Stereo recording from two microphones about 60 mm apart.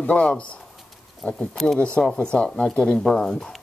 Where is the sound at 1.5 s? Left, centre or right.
Centre.